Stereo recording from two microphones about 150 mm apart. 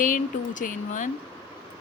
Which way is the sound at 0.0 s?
60° left (ahead or behind).